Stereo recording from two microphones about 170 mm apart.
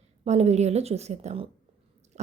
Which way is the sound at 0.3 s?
40° right (ahead or behind).